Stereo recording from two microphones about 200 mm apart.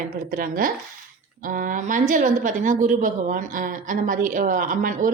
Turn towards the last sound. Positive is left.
turn(degrees=-40)  # may be behind; listen again after turning